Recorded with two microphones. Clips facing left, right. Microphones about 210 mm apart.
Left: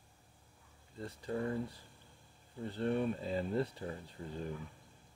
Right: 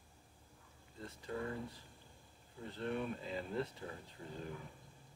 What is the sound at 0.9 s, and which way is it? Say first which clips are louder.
Speech: left 5 dB; 35° left (ahead or behind).